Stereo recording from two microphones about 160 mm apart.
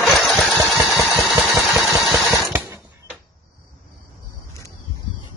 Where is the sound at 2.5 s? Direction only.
20° right (ahead or behind).